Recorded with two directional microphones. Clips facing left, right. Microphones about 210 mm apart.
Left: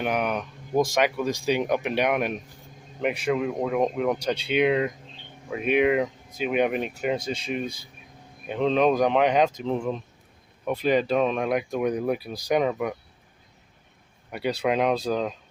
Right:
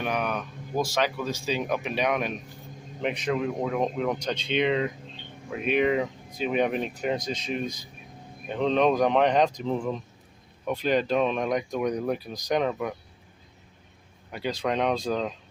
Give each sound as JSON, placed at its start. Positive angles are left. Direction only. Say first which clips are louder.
{"t": 0.0, "sound": "speech", "louder": "left 3 dB", "side_deg": 15}
{"t": 3.0, "sound": "speech", "louder": "left 2 dB", "side_deg": 5}
{"t": 14.3, "sound": "speech", "louder": "left 3 dB", "side_deg": 10}